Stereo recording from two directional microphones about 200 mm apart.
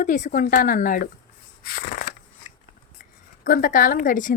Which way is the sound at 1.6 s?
45° left (ahead or behind).